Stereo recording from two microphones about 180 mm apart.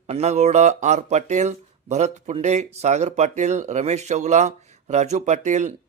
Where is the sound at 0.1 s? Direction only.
35° right (ahead or behind).